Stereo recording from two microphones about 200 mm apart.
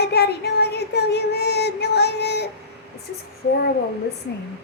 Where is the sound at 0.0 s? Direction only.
55° left (ahead or behind).